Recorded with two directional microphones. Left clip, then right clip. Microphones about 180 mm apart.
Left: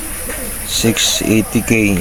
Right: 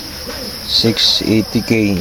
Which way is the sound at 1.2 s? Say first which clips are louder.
Left 1 dB; 15° right (ahead or behind).